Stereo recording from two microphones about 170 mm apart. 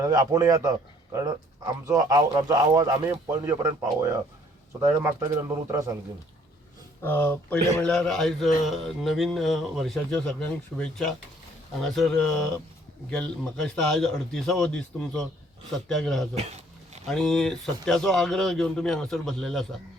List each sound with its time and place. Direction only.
0.0 s speech: 20° right (ahead or behind)
4.8 s speech: 15° right (ahead or behind)
7.0 s speech: 10° left (ahead or behind)